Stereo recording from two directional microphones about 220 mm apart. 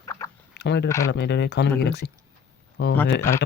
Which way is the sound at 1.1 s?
50° left (ahead or behind).